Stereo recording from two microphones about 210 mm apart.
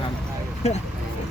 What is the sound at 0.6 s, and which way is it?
Speech, 30° left (ahead or behind).